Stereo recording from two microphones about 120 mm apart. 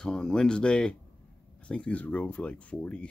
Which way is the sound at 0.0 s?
5° left (ahead or behind).